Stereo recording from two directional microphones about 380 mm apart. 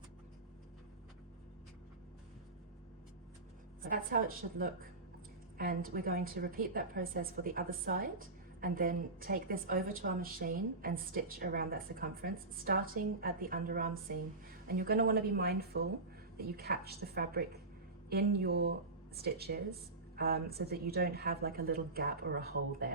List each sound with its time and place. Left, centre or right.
3.8 s a woman's voice: right